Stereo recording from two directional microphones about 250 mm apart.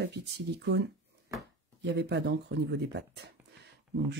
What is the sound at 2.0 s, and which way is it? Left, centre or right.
Speech, right.